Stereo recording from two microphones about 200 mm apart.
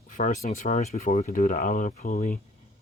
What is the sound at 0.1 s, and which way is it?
Speech, 40° left (ahead or behind).